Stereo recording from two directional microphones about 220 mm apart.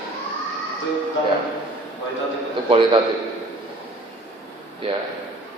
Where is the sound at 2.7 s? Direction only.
25° right (ahead or behind).